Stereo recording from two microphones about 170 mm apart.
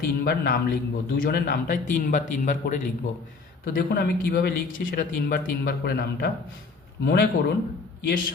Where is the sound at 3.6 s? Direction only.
60° left (ahead or behind).